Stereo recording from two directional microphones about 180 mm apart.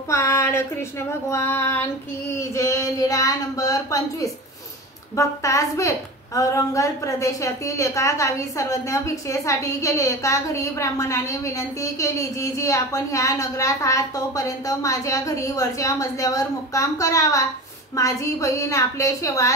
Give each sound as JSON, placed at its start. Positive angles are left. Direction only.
{"t": 0.1, "sound": "a woman's voice", "side_deg": 15}